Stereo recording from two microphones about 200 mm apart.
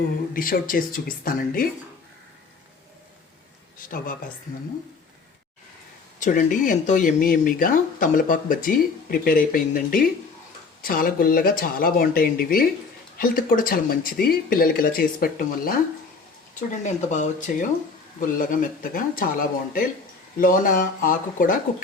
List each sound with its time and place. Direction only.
0.3 s speech: 45° left (ahead or behind)
3.8 s speech: 45° left (ahead or behind)
6.1 s speech: 40° left (ahead or behind)